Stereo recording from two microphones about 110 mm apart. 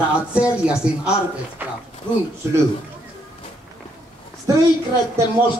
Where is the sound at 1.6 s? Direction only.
15° right (ahead or behind).